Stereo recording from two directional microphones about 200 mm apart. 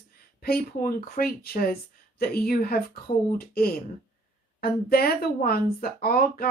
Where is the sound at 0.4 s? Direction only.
50° left (ahead or behind).